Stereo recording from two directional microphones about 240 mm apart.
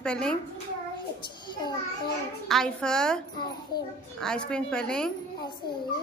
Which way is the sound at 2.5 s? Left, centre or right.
Centre.